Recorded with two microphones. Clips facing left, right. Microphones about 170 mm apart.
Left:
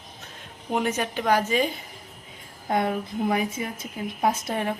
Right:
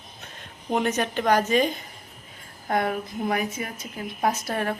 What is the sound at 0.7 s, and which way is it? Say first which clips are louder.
Speech: right 1 dB; 10° left (ahead or behind).